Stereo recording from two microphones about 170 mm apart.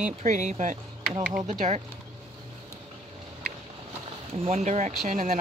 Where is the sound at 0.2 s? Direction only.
45° right (ahead or behind).